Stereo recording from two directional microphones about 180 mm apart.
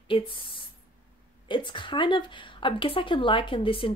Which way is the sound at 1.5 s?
25° left (ahead or behind).